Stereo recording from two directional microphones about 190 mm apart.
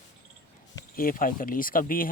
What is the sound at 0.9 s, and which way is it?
Speech, 45° left (ahead or behind).